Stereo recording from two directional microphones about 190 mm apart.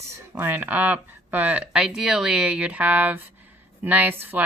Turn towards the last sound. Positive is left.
turn(degrees=-10)  # may be behind; listen again after turning